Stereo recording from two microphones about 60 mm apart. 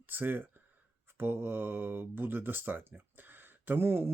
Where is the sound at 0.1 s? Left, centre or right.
Right.